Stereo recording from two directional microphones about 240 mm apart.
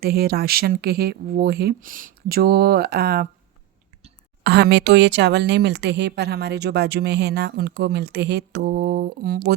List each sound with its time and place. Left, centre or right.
0.0 s speech: right
4.4 s a woman's voice: right